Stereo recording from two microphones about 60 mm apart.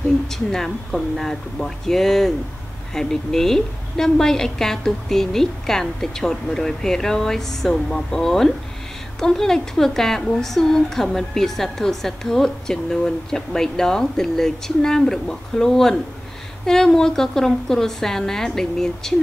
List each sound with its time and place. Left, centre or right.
0.3 s a woman's voice: centre